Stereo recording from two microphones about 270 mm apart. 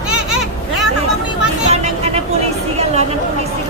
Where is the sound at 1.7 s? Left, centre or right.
Right.